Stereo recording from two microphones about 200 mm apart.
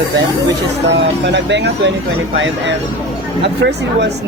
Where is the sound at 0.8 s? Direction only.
60° right (ahead or behind).